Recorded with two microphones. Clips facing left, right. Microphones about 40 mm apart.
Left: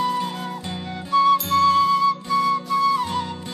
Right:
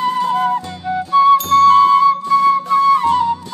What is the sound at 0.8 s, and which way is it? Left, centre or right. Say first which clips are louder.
Music: right 6 dB; centre.